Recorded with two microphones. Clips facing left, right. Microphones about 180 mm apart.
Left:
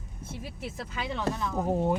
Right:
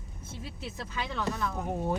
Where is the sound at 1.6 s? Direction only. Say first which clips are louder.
Left 6 dB; 30° left (ahead or behind).